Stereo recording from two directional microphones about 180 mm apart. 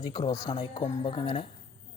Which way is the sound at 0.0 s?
25° left (ahead or behind).